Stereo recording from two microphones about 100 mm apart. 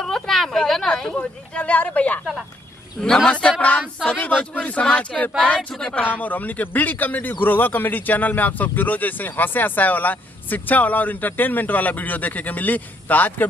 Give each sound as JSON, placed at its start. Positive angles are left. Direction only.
{"t": 0.0, "sound": "speech", "side_deg": 5}
{"t": 3.3, "sound": "speech", "side_deg": 10}